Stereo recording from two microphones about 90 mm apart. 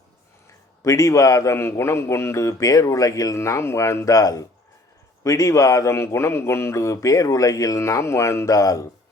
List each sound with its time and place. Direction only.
0.9 s speech: 40° left (ahead or behind)